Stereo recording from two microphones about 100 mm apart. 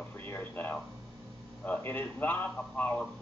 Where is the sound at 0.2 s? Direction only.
15° left (ahead or behind).